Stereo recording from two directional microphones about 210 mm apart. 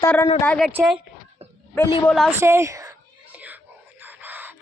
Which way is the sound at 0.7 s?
5° right (ahead or behind).